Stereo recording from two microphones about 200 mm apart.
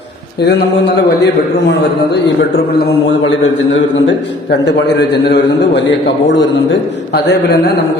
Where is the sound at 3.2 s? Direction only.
70° left (ahead or behind).